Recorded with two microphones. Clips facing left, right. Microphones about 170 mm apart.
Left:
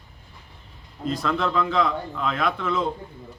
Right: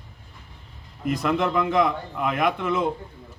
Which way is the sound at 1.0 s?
15° right (ahead or behind).